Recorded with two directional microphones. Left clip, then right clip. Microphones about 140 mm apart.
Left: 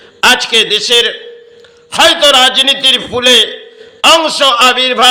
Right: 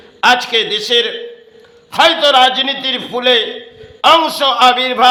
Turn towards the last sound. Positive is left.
turn(degrees=15)  # may be behind; listen again after turning